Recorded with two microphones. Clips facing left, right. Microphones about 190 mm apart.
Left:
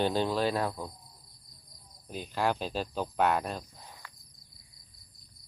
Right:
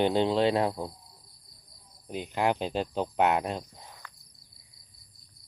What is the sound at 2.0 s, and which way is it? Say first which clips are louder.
Speech: right 3 dB; 20° right (ahead or behind).